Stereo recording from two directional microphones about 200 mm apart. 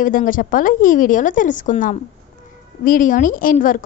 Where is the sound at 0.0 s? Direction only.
45° left (ahead or behind).